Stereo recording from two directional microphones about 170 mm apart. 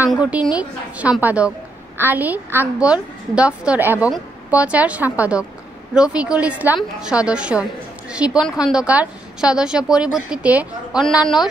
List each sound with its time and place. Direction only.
0.1 s a woman's voice: 5° right (ahead or behind)